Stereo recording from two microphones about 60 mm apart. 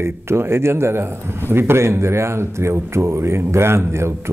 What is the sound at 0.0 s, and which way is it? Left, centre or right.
Speech, right.